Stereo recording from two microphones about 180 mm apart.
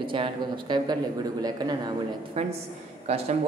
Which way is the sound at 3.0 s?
35° right (ahead or behind).